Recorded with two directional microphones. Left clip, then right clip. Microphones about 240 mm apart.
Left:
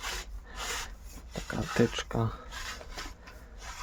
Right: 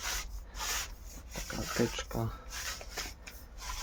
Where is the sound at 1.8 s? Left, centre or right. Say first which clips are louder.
Left 6 dB; left.